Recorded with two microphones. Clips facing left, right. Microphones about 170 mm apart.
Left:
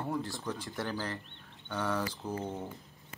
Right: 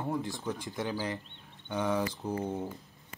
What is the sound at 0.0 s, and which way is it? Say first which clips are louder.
Speech: right 2 dB; 15° right (ahead or behind).